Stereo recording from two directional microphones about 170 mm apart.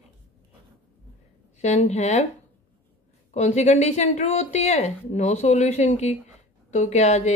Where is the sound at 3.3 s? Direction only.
40° left (ahead or behind).